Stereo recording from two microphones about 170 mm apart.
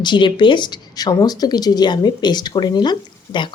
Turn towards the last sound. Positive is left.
turn(degrees=25)  # may be behind; listen again after turning